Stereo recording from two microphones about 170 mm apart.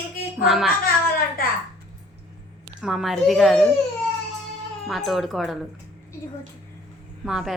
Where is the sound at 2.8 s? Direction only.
Centre (ahead or behind).